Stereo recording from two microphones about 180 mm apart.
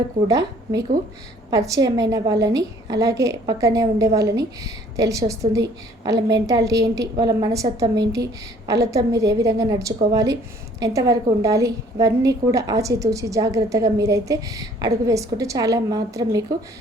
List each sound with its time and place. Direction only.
0.3 s a woman's voice: 20° right (ahead or behind)